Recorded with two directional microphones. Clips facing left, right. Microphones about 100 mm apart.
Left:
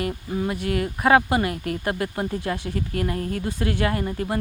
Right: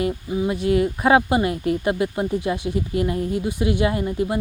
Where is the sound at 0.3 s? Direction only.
5° right (ahead or behind).